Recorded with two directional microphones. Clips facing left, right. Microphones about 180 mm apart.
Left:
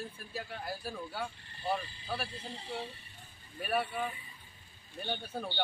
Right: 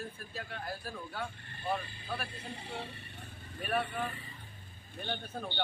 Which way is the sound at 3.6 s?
10° left (ahead or behind).